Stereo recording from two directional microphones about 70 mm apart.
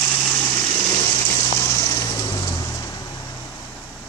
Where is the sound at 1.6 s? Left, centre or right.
Left.